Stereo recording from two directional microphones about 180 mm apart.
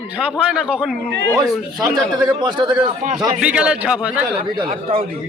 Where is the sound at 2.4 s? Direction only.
25° right (ahead or behind).